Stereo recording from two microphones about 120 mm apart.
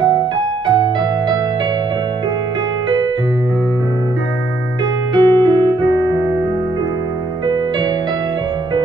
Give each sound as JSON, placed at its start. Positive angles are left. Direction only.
{"t": 5.1, "sound": "keyboard", "side_deg": -40}